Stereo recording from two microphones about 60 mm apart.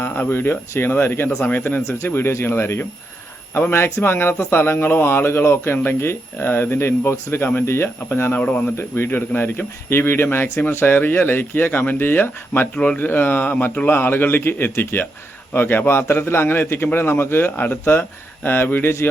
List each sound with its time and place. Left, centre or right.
0.0 s speech: left
12.7 s speech: left
13.1 s speech: left